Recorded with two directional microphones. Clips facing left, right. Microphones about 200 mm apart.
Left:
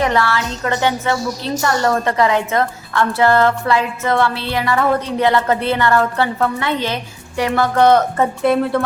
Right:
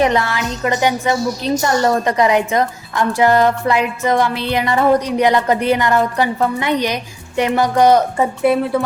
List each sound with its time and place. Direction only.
0.0 s a woman's voice: 20° right (ahead or behind); by 8.8 s 5° right (ahead or behind)